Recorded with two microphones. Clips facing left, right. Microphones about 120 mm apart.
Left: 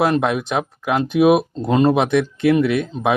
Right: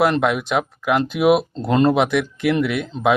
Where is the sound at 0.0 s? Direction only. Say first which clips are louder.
Even; 25° left (ahead or behind).